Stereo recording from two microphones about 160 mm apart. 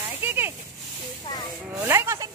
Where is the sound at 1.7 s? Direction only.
15° right (ahead or behind).